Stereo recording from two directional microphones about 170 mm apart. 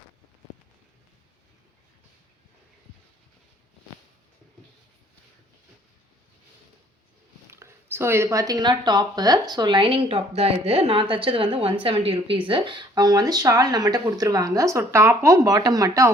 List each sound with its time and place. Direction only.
7.5 s speech: 15° right (ahead or behind)